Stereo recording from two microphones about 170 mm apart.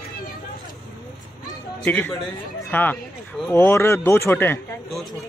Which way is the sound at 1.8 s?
10° left (ahead or behind).